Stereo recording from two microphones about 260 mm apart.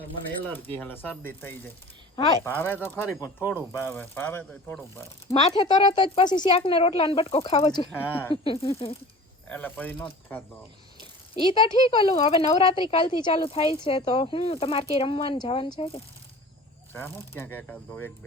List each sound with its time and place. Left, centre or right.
0.4 s speech: centre
5.3 s speech: centre
7.9 s speech: centre
8.4 s speech: left
9.5 s speech: centre
11.5 s speech: centre
16.9 s speech: centre